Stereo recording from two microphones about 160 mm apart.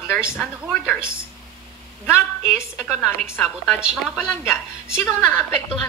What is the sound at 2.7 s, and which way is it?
Speech, centre (ahead or behind).